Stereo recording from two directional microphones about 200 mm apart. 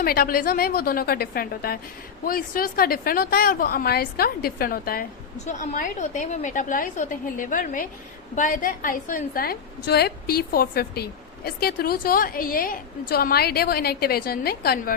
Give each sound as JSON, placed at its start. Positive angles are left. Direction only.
{"t": 0.0, "sound": "a woman's voice", "side_deg": 50}